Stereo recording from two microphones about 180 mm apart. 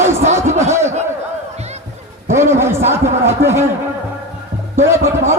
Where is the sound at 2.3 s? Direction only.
15° right (ahead or behind).